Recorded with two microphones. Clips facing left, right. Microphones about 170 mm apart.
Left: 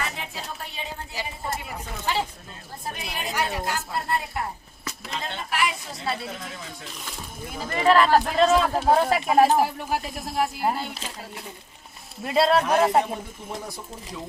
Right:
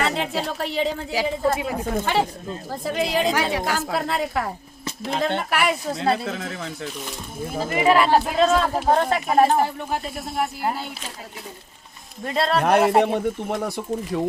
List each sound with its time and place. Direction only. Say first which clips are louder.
0.0 s a woman's voice: right 10 dB; 75° right (ahead or behind)
2.0 s speech: right 4 dB; 55° right (ahead or behind)
2.6 s a woman's voice: right 10 dB; 90° right
5.2 s speech: right 6 dB; 70° right (ahead or behind)
7.7 s speech: right 1 dB; 10° right (ahead or behind)
12.2 s speech: left 2 dB; 5° left (ahead or behind)
13.0 s speech: right 6 dB; 70° right (ahead or behind)